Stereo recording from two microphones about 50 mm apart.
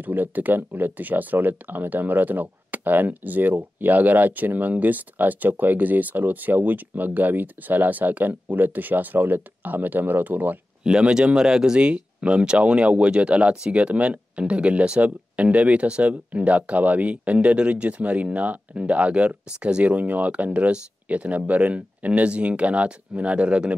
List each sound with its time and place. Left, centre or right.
0.0 s speech: right
10.8 s speech: centre